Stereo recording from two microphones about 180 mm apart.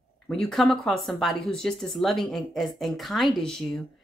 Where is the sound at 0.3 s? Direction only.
Centre (ahead or behind).